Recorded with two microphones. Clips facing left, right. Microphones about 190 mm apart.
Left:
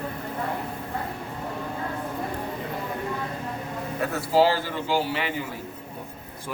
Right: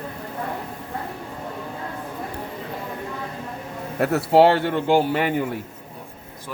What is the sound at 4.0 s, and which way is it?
A man's voice, 70° right (ahead or behind).